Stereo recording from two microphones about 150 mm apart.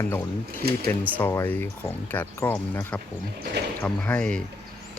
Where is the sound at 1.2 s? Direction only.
15° left (ahead or behind).